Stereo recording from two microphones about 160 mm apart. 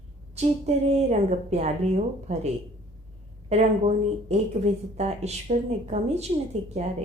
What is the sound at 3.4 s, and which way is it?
Speech, 45° right (ahead or behind).